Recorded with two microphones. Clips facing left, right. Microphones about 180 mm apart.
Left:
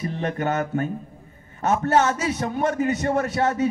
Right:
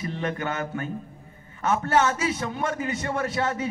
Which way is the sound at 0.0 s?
40° left (ahead or behind).